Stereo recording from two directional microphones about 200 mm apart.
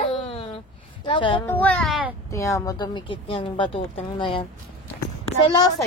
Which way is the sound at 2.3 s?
15° left (ahead or behind).